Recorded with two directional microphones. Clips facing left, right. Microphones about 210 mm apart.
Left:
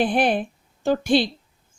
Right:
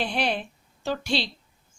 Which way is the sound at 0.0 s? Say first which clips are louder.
Left 7 dB; 50° left (ahead or behind).